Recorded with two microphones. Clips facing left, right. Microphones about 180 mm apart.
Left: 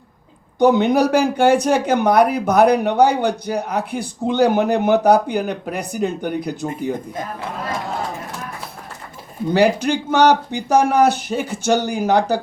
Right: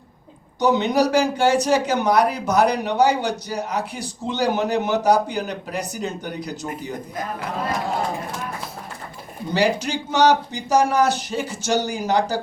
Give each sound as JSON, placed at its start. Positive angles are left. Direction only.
{"t": 0.6, "sound": "speech", "side_deg": 55}
{"t": 9.5, "sound": "speech", "side_deg": 55}